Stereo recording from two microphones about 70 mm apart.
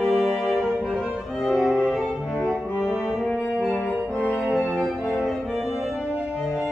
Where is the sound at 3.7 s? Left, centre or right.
Centre.